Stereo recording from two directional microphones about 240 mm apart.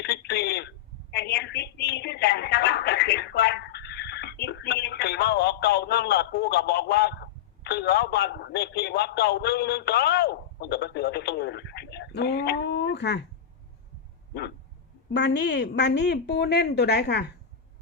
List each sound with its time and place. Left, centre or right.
0.0 s telephone: left
1.1 s a sound: left
7.6 s a man's voice: left
15.1 s a woman's voice: left